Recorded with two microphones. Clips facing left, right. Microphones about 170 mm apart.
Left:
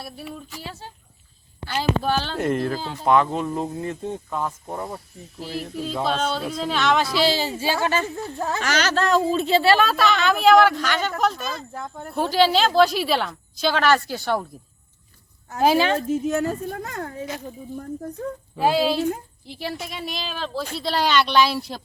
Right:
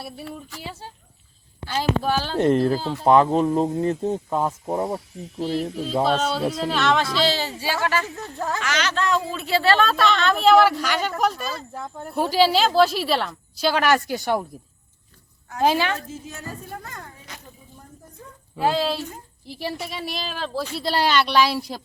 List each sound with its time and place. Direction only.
0.6 s a woman's voice: 10° right (ahead or behind)
2.4 s speech: 35° right (ahead or behind)
6.1 s speech: centre (ahead or behind); by 8.6 s 15° left (ahead or behind)
8.6 s speech: 40° left (ahead or behind)
9.5 s speech: 15° left (ahead or behind); by 14.4 s 15° right (ahead or behind)
15.6 s speech: 15° left (ahead or behind)
16.1 s a woman's voice: 70° left (ahead or behind)
18.5 s a woman's voice: 10° left (ahead or behind); by 21.8 s 10° right (ahead or behind)